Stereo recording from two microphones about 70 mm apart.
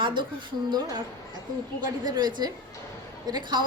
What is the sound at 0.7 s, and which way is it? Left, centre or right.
Speech, right.